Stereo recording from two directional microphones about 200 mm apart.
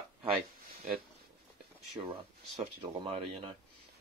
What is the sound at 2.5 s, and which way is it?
Speech, 30° right (ahead or behind).